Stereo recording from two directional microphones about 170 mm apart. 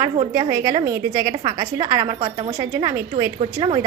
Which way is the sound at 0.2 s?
30° right (ahead or behind).